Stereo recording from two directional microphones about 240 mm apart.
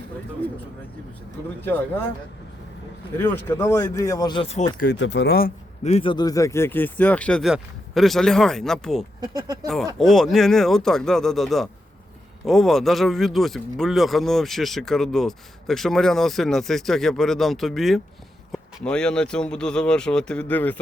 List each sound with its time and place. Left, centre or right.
3.2 s speech: centre; by 4.9 s left
4.9 s speech: left; by 9.0 s centre
9.2 s speech: centre
9.6 s speech: centre